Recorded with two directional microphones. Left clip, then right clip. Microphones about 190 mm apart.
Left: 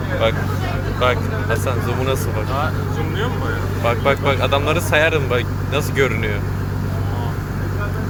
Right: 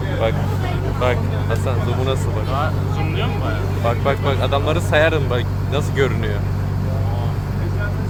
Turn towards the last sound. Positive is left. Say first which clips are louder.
# left 2 dB
turn(degrees=0)  # may be behind; listen again after turning